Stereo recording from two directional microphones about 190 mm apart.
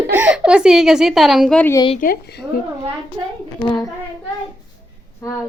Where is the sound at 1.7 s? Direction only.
25° left (ahead or behind).